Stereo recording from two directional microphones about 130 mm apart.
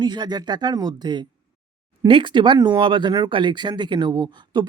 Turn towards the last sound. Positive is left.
turn(degrees=-35)  # may be behind; listen again after turning